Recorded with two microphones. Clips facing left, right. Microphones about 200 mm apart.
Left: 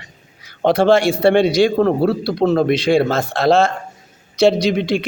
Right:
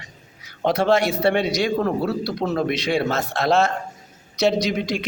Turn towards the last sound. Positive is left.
turn(degrees=30)  # may be behind; listen again after turning